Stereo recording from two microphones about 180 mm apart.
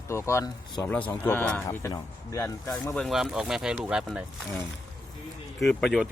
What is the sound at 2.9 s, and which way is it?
Speech, centre (ahead or behind).